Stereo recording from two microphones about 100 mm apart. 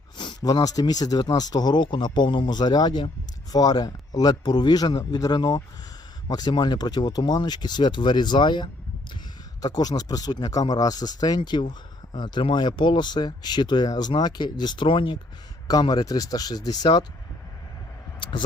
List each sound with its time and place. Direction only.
0.2 s speech: 50° left (ahead or behind)
15.6 s speech: 40° left (ahead or behind)
18.2 s speech: 50° left (ahead or behind)